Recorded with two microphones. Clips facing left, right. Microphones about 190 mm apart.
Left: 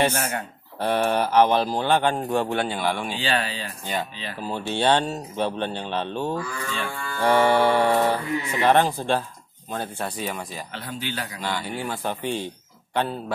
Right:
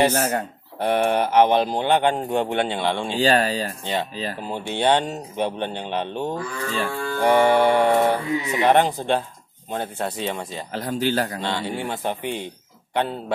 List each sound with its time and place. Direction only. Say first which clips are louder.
0.1 s livestock: right 5 dB; 35° right (ahead or behind)
0.7 s speech: right 2 dB; 20° right (ahead or behind)
3.2 s livestock: right 7 dB; 40° right (ahead or behind)
4.4 s speech: left 1 dB; 20° right (ahead or behind)
6.3 s livestock: right 2 dB; 35° right (ahead or behind)
7.2 s speech: right 2 dB; 20° right (ahead or behind)
10.7 s a man's voice: right 13 dB; 40° right (ahead or behind)
11.4 s speech: right 2 dB; 25° right (ahead or behind)